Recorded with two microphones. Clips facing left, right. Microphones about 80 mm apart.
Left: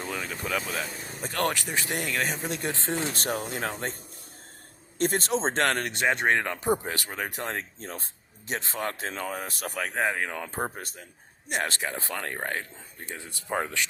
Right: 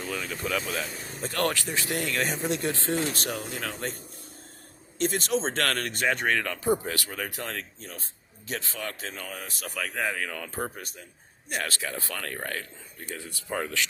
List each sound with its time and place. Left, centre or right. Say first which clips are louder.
0.2 s speech: right 1 dB; centre
2.2 s speech: right 2 dB; centre
2.6 s speech: right 2 dB; centre
3.2 s speech: left 3 dB; left
3.6 s speech: left 2 dB; left
4.9 s a man's voice: left 2 dB; left
5.3 s speech: left 1 dB; left
5.6 s speech: left 2 dB; left
8.7 s speech: left 4 dB; left
9.7 s speech: left 2 dB; left
11.5 s speech: left 2 dB; left